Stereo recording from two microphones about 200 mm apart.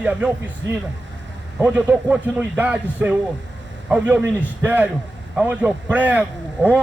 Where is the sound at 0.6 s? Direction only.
65° right (ahead or behind).